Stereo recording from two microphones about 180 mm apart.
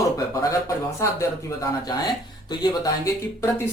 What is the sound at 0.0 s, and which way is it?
Speech, 20° left (ahead or behind).